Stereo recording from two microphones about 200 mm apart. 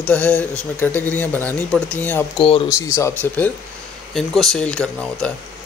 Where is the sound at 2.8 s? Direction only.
15° left (ahead or behind).